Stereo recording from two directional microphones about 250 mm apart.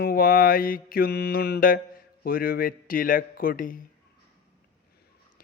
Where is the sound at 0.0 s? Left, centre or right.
Left.